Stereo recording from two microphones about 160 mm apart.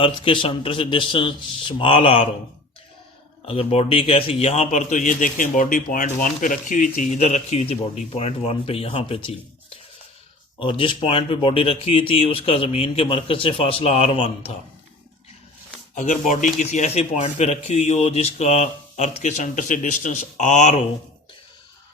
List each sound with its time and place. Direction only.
0.0 s speech: 30° left (ahead or behind)
3.4 s a man's voice: 35° left (ahead or behind)
10.6 s speech: 30° left (ahead or behind)
16.0 s a man's voice: 50° left (ahead or behind)